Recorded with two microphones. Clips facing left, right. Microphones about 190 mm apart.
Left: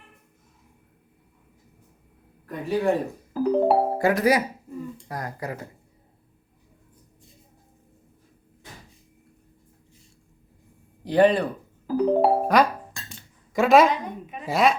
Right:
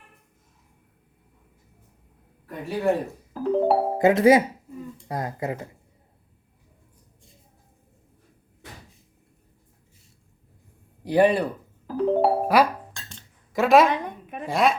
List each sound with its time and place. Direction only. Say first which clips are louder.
2.5 s music: left 1 dB; centre (ahead or behind)
3.9 s speech: right 4 dB; 25° right (ahead or behind)
11.0 s speech: left 1 dB; 10° right (ahead or behind)
11.9 s speech: left 1 dB; centre (ahead or behind)
12.9 s dishes: left 2 dB; 5° left (ahead or behind)
14.4 s music: left 1 dB; centre (ahead or behind)